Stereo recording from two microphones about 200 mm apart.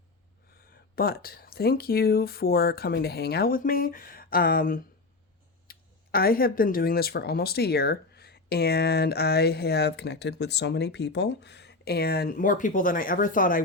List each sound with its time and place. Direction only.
0.9 s speech: 50° left (ahead or behind)